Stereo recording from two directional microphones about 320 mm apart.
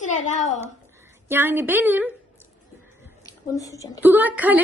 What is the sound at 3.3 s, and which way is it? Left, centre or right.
Speech, centre.